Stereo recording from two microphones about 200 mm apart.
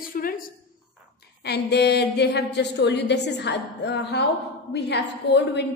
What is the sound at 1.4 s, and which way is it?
A woman's voice, 55° left (ahead or behind).